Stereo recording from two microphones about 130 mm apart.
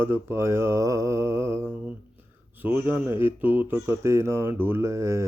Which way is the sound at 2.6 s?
15° right (ahead or behind).